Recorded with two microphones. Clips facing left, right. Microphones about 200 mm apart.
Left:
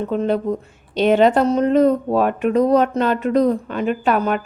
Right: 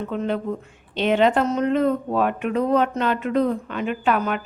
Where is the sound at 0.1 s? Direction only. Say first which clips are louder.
Left 6 dB; 40° left (ahead or behind).